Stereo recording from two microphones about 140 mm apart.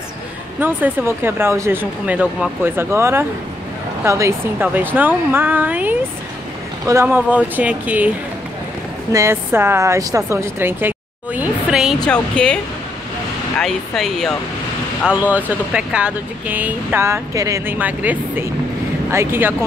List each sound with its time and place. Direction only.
0.6 s speech: 15° right (ahead or behind)
9.1 s speech: 20° right (ahead or behind); by 12.5 s 5° left (ahead or behind)
13.6 s speech: 5° left (ahead or behind)
15.0 s speech: 10° right (ahead or behind)
17.7 s speech: 10° right (ahead or behind)